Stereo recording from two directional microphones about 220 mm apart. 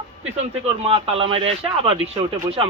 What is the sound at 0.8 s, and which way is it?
Speech, 25° right (ahead or behind).